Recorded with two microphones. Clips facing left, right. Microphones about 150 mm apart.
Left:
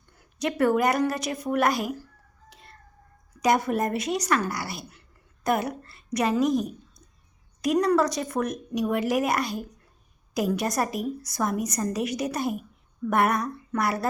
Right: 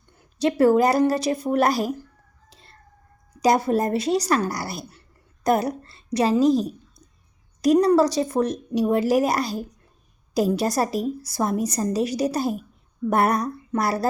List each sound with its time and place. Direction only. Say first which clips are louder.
0.2 s a woman's voice: right 6 dB; 30° right (ahead or behind)
2.5 s a sound: left 3 dB; 30° right (ahead or behind)
3.4 s a woman's voice: right 4 dB; 35° right (ahead or behind)